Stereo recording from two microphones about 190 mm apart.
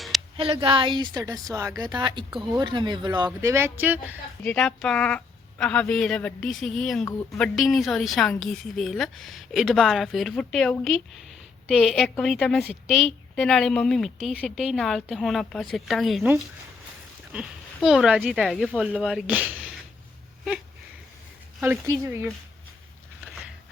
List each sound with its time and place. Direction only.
0.3 s a woman's voice: 30° right (ahead or behind); by 4.2 s 10° right (ahead or behind)
4.4 s a woman's voice: 5° left (ahead or behind)
17.7 s a woman's voice: centre (ahead or behind)
21.6 s speech: 15° right (ahead or behind)